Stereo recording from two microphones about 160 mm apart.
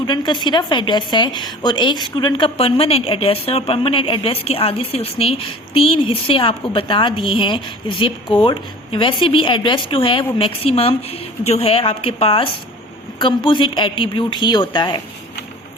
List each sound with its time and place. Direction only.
0.0 s a woman's voice: 30° left (ahead or behind)